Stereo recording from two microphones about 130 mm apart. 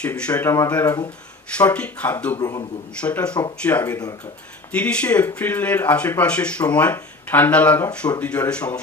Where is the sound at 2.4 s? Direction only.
30° left (ahead or behind).